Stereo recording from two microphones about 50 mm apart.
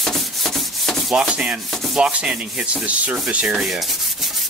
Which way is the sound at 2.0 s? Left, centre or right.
Right.